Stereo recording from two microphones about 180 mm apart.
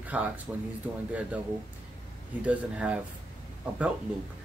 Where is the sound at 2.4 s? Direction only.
5° right (ahead or behind).